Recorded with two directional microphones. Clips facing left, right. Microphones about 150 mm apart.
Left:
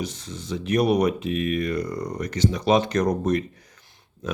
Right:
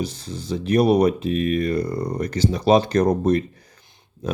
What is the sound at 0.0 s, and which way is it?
Speech, 35° right (ahead or behind).